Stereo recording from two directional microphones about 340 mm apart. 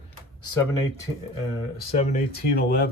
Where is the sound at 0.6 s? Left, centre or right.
Centre.